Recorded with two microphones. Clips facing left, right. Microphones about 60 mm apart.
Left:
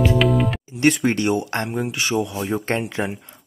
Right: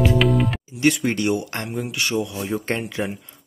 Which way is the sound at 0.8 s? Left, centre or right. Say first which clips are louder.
Left 2 dB; left.